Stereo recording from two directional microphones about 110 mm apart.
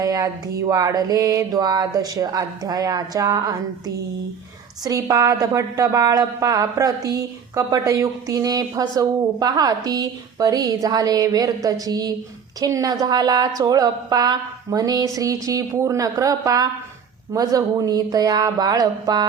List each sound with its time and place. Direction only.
0.0 s a woman's voice: 35° right (ahead or behind)